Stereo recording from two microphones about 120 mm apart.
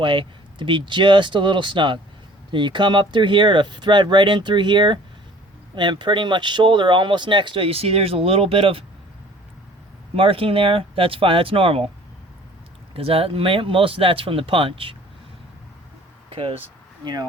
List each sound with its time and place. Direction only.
0.0 s speech: 40° right (ahead or behind)
10.2 s speech: 50° right (ahead or behind)
12.9 s speech: 55° right (ahead or behind)
16.3 s speech: 50° right (ahead or behind)
17.0 s speech: 35° right (ahead or behind)